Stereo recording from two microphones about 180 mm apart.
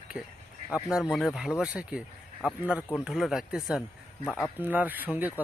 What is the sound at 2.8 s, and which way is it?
Speech, 10° left (ahead or behind).